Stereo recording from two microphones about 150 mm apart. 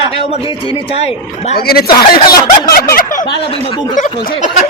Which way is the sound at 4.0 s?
55° left (ahead or behind).